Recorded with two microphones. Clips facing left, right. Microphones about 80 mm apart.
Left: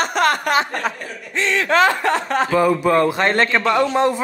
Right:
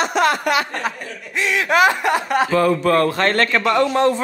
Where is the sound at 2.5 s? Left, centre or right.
Centre.